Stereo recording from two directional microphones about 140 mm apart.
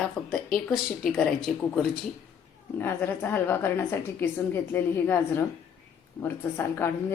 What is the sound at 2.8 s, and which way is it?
A woman's voice, 15° left (ahead or behind).